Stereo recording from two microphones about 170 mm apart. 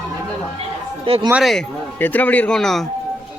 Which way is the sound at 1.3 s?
Centre (ahead or behind).